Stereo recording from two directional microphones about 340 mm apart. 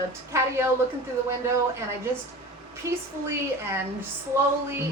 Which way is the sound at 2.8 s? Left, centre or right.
Centre.